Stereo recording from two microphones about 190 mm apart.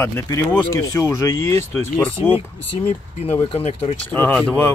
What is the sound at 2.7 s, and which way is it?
Speech, 35° left (ahead or behind).